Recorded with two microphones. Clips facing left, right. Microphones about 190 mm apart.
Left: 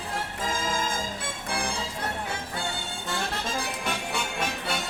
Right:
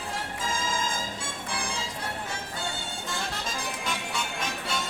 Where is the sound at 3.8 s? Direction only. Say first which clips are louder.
Left 2 dB; 60° left (ahead or behind).